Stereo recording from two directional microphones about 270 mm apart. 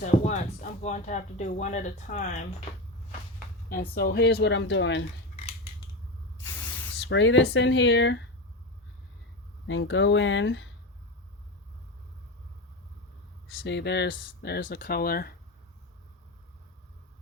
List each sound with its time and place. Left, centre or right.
0.0 s speech: left
3.7 s speech: left
7.0 s speech: left
9.6 s speech: left
13.5 s speech: left